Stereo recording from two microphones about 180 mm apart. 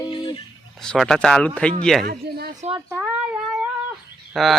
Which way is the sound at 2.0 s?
60° right (ahead or behind).